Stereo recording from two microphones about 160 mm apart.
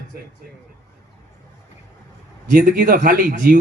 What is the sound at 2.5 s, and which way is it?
A man's voice, 60° right (ahead or behind).